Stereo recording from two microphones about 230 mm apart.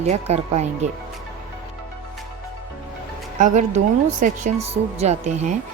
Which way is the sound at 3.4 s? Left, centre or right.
Right.